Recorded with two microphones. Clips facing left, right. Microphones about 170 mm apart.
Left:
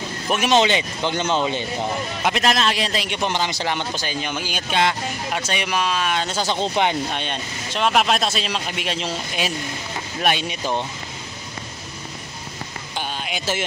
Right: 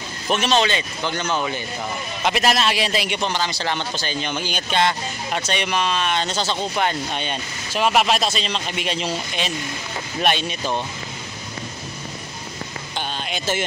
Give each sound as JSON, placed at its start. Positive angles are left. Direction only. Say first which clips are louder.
{"t": 0.3, "sound": "speech", "louder": "left 2 dB", "side_deg": 15}
{"t": 2.2, "sound": "speech", "louder": "right 1 dB", "side_deg": -5}
{"t": 3.2, "sound": "speech", "louder": "left 1 dB", "side_deg": 20}
{"t": 7.2, "sound": "speech", "louder": "even", "side_deg": -5}
{"t": 12.9, "sound": "a sound", "louder": "even", "side_deg": 5}